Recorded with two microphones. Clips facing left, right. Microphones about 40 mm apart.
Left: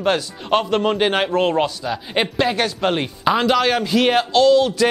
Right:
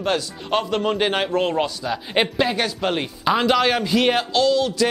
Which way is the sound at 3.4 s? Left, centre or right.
Centre.